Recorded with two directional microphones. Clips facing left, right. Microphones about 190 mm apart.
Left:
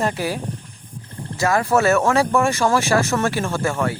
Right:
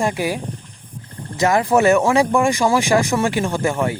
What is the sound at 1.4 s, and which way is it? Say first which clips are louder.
Speech: right 3 dB; 20° right (ahead or behind).